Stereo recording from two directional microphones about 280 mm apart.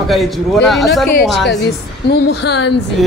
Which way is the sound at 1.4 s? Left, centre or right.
Left.